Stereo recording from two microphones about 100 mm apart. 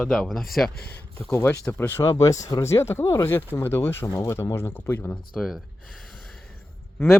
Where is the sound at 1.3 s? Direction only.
25° left (ahead or behind).